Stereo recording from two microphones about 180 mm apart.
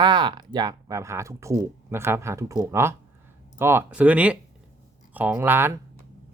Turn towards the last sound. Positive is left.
turn(degrees=-10)  # may be behind; listen again after turning